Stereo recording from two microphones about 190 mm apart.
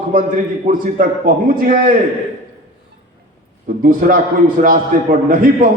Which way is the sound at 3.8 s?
45° right (ahead or behind).